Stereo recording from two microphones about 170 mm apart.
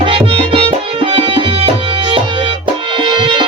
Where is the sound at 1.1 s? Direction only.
30° right (ahead or behind).